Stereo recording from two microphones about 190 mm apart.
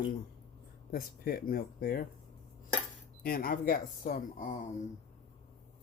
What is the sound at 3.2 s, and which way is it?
Speech, 50° left (ahead or behind).